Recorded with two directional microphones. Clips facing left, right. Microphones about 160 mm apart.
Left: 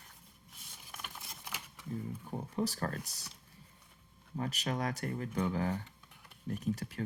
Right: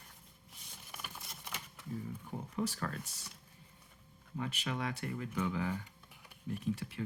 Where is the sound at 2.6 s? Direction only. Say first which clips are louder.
Left 2 dB; 40° left (ahead or behind).